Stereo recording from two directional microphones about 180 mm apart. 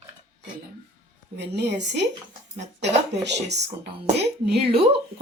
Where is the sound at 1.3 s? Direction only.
70° right (ahead or behind).